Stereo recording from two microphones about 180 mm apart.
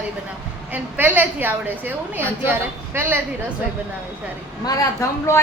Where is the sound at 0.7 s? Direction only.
10° right (ahead or behind).